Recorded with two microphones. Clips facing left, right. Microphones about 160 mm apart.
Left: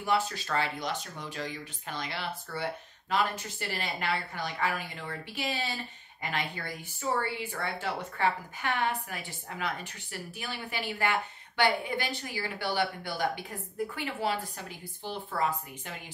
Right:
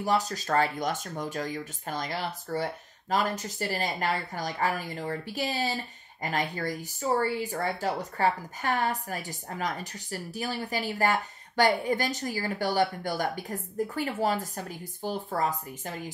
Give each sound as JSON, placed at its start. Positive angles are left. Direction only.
{"t": 0.0, "sound": "a woman's voice", "side_deg": -40}